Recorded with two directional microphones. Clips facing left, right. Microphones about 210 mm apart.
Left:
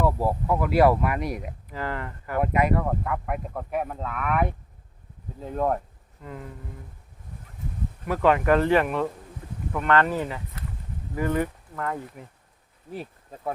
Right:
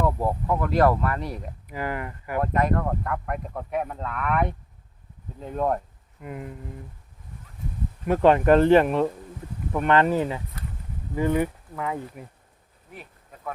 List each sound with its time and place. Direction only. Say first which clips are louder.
0.0 s speech: left 1 dB; 5° left (ahead or behind)
1.7 s speech: right 2 dB; 15° right (ahead or behind)
2.4 s speech: left 1 dB; 10° left (ahead or behind)
6.2 s speech: right 3 dB; 15° right (ahead or behind)
8.0 s speech: right 3 dB; 30° right (ahead or behind)
9.7 s speech: right 2 dB; 10° right (ahead or behind)
12.9 s insect: left 8 dB; 30° left (ahead or behind)